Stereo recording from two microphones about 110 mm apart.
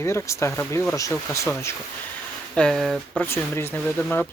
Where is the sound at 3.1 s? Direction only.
20° left (ahead or behind).